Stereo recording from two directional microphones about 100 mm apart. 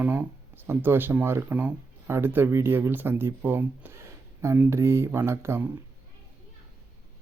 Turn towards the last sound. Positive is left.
turn(degrees=-25)  # may be behind; listen again after turning